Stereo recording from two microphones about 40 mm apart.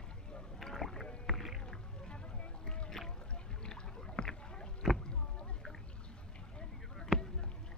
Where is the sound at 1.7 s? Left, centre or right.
Centre.